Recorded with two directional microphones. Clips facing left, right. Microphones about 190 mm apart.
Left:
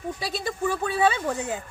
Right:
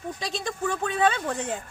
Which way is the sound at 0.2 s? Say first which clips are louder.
Left 1 dB; 5° left (ahead or behind).